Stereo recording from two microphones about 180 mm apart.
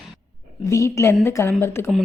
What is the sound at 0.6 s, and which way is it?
A woman's voice, 15° left (ahead or behind).